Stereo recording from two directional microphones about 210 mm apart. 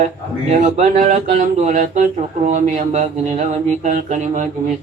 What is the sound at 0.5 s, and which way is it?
Mantra, 35° right (ahead or behind).